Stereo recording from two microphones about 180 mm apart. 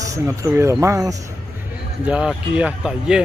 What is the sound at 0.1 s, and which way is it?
Speech, 15° right (ahead or behind).